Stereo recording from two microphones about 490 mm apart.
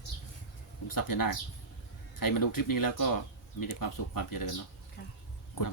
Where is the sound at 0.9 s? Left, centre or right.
Left.